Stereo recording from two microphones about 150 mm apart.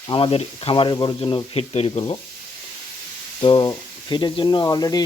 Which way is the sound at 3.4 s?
35° left (ahead or behind).